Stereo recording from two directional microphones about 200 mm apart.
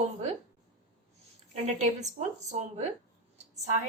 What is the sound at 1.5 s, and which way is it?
A woman's voice, 35° right (ahead or behind).